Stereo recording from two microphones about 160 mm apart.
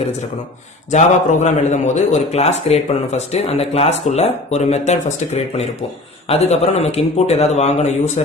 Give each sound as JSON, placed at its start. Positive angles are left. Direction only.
{"t": 0.9, "sound": "a man's voice", "side_deg": 50}